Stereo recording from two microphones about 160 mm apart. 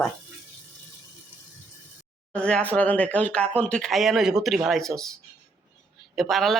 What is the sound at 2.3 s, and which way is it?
Speech, 5° left (ahead or behind).